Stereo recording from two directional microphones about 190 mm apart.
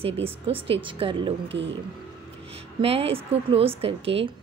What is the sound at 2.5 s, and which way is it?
A woman's voice, 30° right (ahead or behind).